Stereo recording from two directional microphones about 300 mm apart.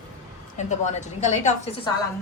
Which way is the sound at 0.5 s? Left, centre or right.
Left.